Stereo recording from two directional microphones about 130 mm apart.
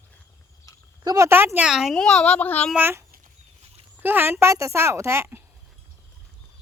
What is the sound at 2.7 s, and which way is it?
Speech, 15° right (ahead or behind).